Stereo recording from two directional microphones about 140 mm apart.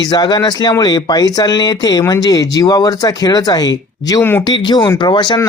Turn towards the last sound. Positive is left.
turn(degrees=35)  # may be behind; listen again after turning